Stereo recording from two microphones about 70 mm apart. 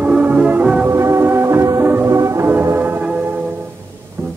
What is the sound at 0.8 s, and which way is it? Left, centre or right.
Music, right.